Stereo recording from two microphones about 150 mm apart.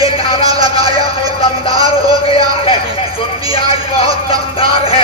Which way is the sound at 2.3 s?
40° left (ahead or behind).